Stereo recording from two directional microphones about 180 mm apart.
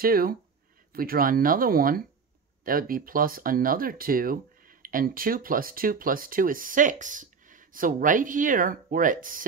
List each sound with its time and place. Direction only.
0.0 s speech: 55° right (ahead or behind)